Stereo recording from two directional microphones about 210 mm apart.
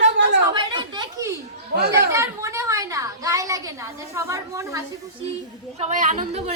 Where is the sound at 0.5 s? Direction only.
20° right (ahead or behind).